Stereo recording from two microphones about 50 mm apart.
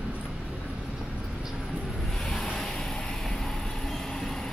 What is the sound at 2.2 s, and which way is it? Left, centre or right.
Vehicle, centre.